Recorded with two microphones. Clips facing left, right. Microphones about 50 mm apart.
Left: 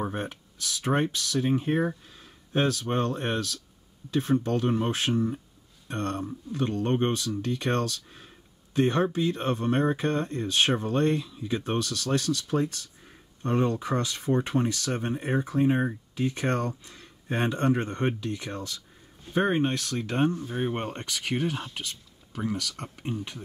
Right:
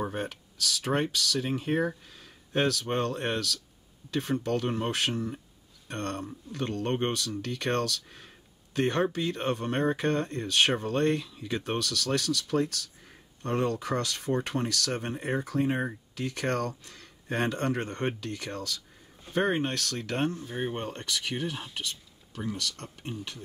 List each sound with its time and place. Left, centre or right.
0.0 s speech: left
1.9 s a sound: centre
2.9 s speech: centre
20.7 s speech: left
22.8 s speech: centre